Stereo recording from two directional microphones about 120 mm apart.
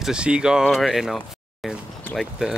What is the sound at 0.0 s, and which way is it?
Speech, 5° right (ahead or behind).